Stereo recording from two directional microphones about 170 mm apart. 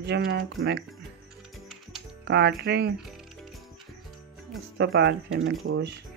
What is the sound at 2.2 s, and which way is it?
Speech, 80° right.